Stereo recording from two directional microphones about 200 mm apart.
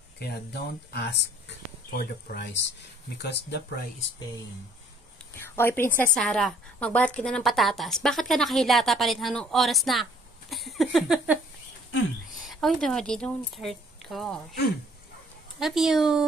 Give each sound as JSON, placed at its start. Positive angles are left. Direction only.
{"t": 0.2, "sound": "speech", "side_deg": 55}
{"t": 5.3, "sound": "a woman's voice", "side_deg": 10}
{"t": 10.5, "sound": "a sound", "side_deg": 0}
{"t": 12.4, "sound": "speech", "side_deg": 0}
{"t": 15.6, "sound": "a woman's voice", "side_deg": 0}